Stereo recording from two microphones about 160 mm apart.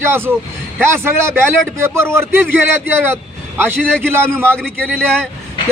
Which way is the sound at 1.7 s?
15° right (ahead or behind).